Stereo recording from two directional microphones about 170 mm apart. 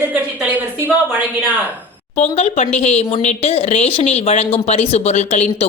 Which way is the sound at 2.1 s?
40° left (ahead or behind).